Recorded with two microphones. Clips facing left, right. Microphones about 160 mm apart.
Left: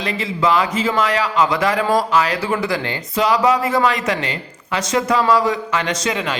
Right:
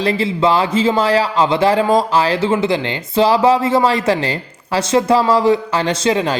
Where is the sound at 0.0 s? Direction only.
30° right (ahead or behind).